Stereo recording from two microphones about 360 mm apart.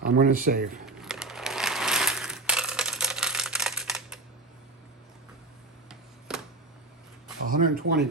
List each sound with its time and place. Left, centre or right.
0.0 s speech: right
0.9 s coin: centre
5.9 s a sound: centre
7.4 s speech: right